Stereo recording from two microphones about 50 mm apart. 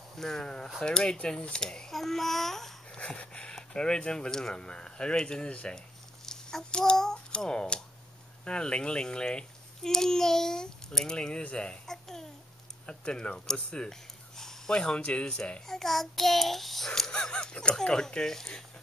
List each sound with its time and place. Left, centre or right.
0.2 s a child's voice: centre
3.0 s wheeze: left
3.5 s a child's voice: centre
11.9 s babbling: centre
12.8 s speech: centre
15.0 s wheeze: left
15.6 s a child's voice: centre